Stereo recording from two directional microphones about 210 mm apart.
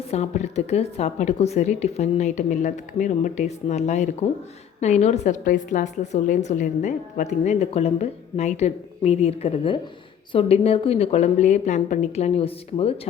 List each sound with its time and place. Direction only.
0.1 s a woman's voice: 30° left (ahead or behind)